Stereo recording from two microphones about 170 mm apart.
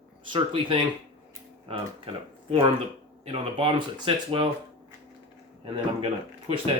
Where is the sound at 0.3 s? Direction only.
30° right (ahead or behind).